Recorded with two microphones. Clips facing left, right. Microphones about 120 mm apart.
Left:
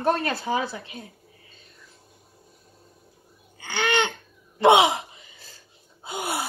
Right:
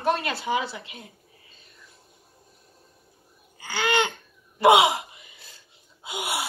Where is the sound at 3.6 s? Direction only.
25° left (ahead or behind).